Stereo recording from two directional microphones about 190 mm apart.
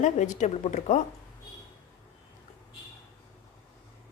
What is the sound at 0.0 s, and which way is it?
A woman's voice, 40° left (ahead or behind).